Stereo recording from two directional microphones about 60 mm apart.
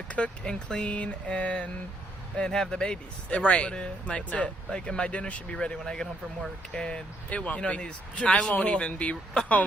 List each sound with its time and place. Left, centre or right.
0.1 s speech: centre